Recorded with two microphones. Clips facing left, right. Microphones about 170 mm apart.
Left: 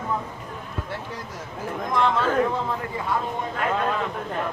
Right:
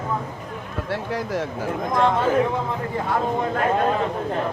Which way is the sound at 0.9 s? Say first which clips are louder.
Right 8 dB; 85° right.